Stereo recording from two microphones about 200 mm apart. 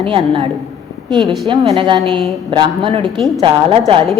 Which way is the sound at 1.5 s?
25° right (ahead or behind).